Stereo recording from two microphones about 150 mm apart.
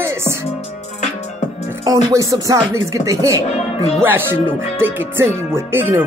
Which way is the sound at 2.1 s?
20° right (ahead or behind).